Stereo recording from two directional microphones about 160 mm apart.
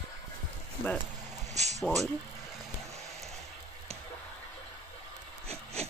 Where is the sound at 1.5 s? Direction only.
45° right (ahead or behind).